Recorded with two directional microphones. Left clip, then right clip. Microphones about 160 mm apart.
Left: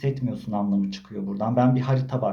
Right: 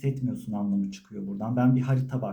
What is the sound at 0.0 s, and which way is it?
Speech, 15° right (ahead or behind).